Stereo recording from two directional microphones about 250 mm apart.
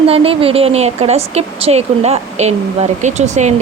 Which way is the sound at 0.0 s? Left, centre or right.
Right.